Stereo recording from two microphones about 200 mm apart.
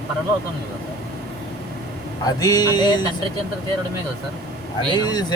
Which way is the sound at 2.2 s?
20° left (ahead or behind).